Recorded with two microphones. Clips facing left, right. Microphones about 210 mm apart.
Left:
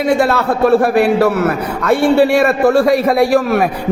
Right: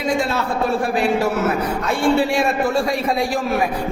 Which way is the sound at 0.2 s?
65° left (ahead or behind).